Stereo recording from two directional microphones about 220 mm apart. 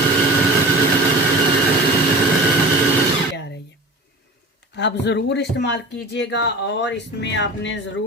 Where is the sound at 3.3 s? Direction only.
50° left (ahead or behind).